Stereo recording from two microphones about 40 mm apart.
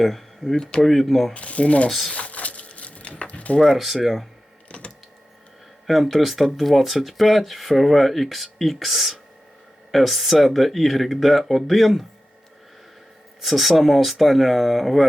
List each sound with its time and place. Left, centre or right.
0.0 s speech: centre
0.5 s speech: centre
0.9 s speech: centre
1.3 s speech: left
2.1 s a sound: left
3.8 s speech: centre
5.9 s speech: centre
13.4 s speech: centre